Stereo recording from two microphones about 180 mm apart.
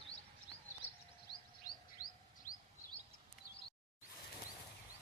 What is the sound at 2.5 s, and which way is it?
Bird vocalization, 45° left (ahead or behind).